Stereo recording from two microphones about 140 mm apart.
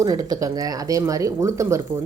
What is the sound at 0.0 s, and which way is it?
Speech, 25° right (ahead or behind).